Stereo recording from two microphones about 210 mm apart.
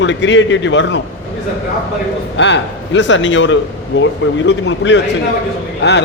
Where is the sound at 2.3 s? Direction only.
60° left (ahead or behind).